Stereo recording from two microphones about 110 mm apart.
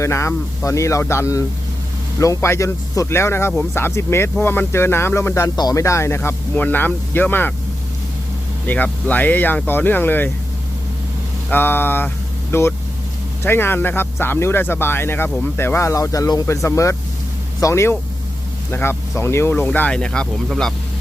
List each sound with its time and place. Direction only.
0.0 s speech: 25° left (ahead or behind)
8.6 s speech: 15° left (ahead or behind)
11.5 s speech: 20° left (ahead or behind)